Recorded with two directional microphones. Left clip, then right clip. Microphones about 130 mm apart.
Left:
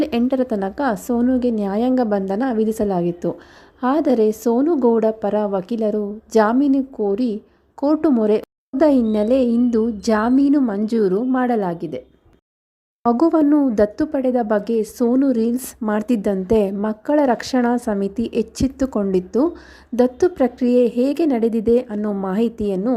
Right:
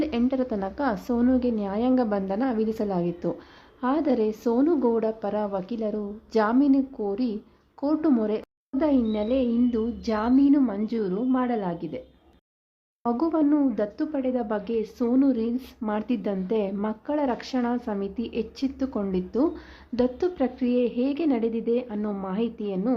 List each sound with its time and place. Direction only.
0.3 s a woman's voice: 45° left (ahead or behind)
13.1 s a woman's voice: 50° left (ahead or behind)